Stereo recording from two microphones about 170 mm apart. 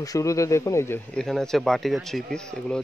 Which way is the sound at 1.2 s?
5° left (ahead or behind).